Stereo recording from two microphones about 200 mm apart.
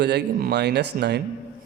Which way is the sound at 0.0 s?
55° right (ahead or behind).